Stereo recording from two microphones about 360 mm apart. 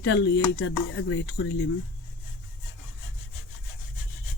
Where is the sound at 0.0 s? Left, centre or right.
Left.